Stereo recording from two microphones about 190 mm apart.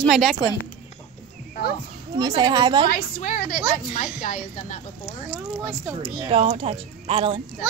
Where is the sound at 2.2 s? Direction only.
20° right (ahead or behind).